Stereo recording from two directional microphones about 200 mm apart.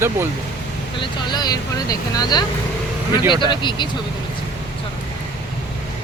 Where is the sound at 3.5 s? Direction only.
25° left (ahead or behind).